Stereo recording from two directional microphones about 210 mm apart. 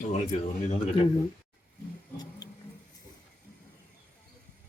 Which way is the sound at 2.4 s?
20° left (ahead or behind).